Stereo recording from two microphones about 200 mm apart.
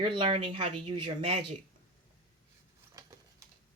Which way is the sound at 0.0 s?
25° right (ahead or behind).